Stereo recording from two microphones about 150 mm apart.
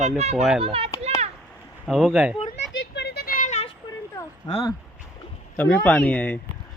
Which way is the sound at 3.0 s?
85° left.